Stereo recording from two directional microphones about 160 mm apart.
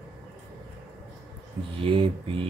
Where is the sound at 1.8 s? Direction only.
35° right (ahead or behind).